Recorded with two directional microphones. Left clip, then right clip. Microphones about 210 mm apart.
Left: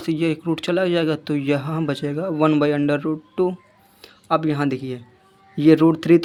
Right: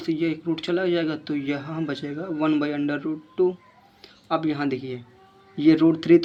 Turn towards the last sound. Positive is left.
turn(degrees=40)  # may be behind; listen again after turning